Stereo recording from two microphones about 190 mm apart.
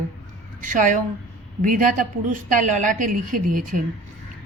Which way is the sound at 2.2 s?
40° right (ahead or behind).